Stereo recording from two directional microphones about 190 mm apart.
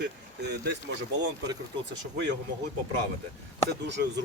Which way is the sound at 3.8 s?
65° right (ahead or behind).